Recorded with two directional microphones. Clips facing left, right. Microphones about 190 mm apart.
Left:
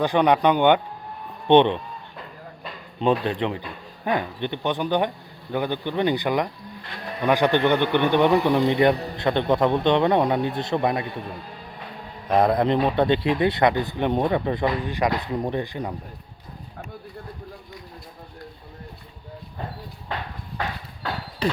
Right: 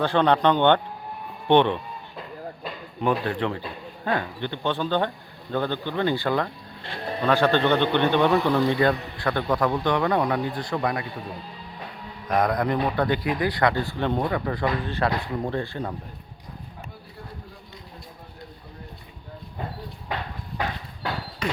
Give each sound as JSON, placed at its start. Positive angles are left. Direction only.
{"t": 0.0, "sound": "a man's voice", "side_deg": 15}
{"t": 3.0, "sound": "a man's voice", "side_deg": 20}
{"t": 6.8, "sound": "sheep", "side_deg": -30}
{"t": 7.3, "sound": "a man's voice", "side_deg": 15}
{"t": 12.3, "sound": "a man's voice", "side_deg": 25}
{"t": 21.4, "sound": "a sound", "side_deg": 35}